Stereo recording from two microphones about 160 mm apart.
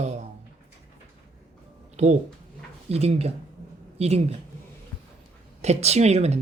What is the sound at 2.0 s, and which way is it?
Speech, 45° right (ahead or behind).